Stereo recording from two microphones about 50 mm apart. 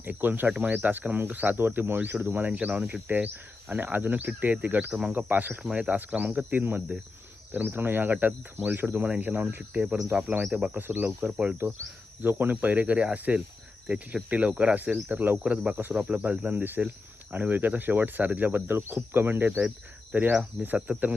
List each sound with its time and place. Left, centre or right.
0.0 s speech: right
4.9 s speech: right
5.1 s speech: right
5.6 s speech: right
6.0 s speech: right
11.2 s speech: right
12.2 s speech: right
15.4 s speech: right
15.7 s speech: right
16.0 s speech: right
20.1 s cricket: right
20.7 s speech: right